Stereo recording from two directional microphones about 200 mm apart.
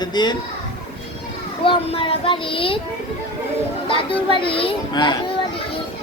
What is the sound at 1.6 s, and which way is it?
A child's voice, 25° left (ahead or behind).